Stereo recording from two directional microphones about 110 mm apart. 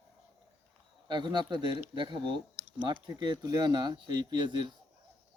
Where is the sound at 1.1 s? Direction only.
45° right (ahead or behind).